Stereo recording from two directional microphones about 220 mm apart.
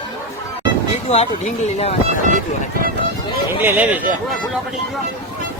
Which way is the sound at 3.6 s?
10° right (ahead or behind).